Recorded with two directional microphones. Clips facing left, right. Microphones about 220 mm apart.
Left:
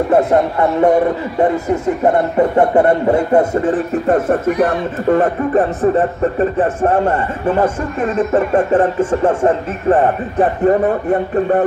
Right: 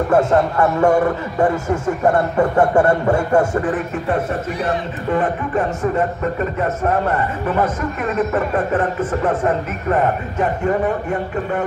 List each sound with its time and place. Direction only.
0.1 s speech: 20° left (ahead or behind)
4.1 s speech: 50° left (ahead or behind); by 11.6 s 35° left (ahead or behind)